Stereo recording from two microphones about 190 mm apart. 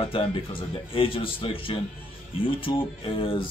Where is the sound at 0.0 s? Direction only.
25° left (ahead or behind).